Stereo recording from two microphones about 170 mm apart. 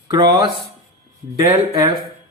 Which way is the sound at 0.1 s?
25° right (ahead or behind).